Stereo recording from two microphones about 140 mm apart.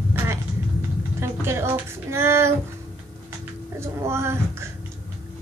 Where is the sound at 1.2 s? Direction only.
20° right (ahead or behind).